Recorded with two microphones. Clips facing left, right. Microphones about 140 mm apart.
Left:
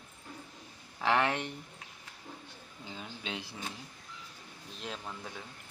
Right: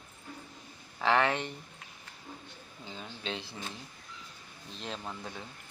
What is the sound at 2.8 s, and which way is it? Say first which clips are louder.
Speech: right 2 dB; 10° left (ahead or behind).